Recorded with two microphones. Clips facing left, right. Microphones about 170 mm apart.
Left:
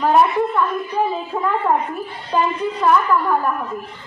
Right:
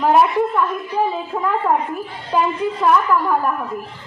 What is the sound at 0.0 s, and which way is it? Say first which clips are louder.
A woman's voice: right 1 dB; 5° right (ahead or behind).